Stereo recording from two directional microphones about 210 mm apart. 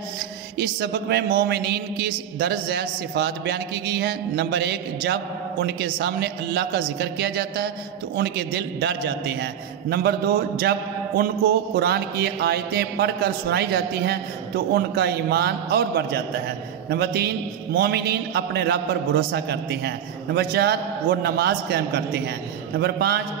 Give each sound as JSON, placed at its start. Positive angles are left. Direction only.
{"t": 0.6, "sound": "a man's voice", "side_deg": -50}